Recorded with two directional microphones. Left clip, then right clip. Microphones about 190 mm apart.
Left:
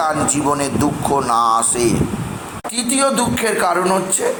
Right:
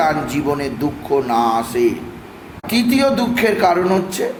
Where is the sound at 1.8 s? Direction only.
60° left (ahead or behind).